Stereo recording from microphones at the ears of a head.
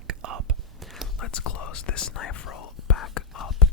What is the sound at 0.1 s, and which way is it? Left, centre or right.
Whispering, right.